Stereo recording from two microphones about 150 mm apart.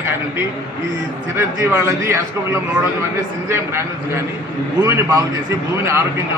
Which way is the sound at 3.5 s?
15° right (ahead or behind).